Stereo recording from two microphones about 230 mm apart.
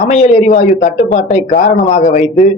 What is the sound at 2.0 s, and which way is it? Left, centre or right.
Speech, left.